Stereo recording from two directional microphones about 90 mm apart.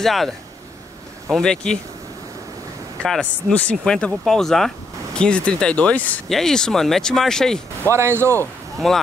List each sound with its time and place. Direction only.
0.0 s speech: centre (ahead or behind)
1.3 s speech: 5° left (ahead or behind)
3.0 s speech: 10° left (ahead or behind)
6.2 s speech: 5° left (ahead or behind)
7.9 s speech: 30° right (ahead or behind)
8.7 s speech: 5° left (ahead or behind)